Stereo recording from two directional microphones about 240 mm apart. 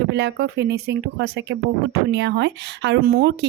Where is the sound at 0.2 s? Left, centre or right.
Right.